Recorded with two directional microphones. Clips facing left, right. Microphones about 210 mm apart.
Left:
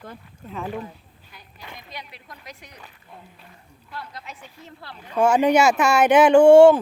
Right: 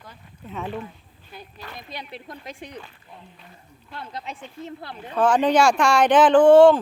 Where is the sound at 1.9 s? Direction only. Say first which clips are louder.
Right 4 dB; 25° right (ahead or behind).